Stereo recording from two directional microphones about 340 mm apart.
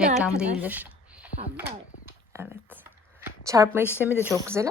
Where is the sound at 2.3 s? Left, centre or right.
Centre.